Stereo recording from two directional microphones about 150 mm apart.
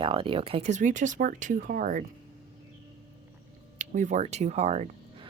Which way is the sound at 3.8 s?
55° right (ahead or behind).